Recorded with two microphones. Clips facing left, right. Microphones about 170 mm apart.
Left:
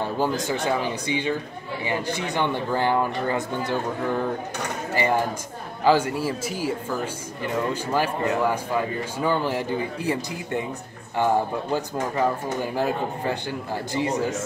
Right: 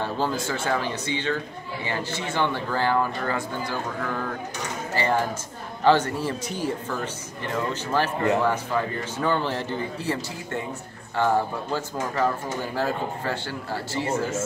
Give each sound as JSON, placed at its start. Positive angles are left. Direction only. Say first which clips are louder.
{"t": 0.0, "sound": "speech", "louder": "left 2 dB", "side_deg": 15}